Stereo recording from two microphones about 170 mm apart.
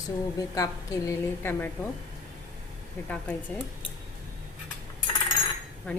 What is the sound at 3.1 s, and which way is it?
Dishes, 10° left (ahead or behind).